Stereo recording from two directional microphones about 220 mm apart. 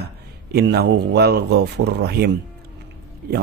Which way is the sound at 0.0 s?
45° right (ahead or behind).